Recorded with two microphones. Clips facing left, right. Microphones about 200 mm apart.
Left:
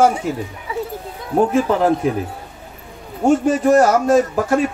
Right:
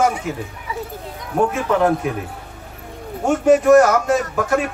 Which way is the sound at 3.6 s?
35° left (ahead or behind).